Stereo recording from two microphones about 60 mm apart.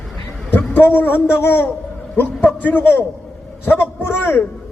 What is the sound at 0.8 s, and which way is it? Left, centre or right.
A man's voice, left.